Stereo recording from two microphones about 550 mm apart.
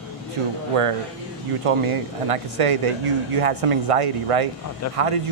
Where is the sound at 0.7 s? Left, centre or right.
Right.